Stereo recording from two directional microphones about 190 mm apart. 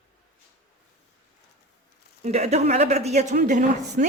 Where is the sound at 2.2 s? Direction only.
35° right (ahead or behind).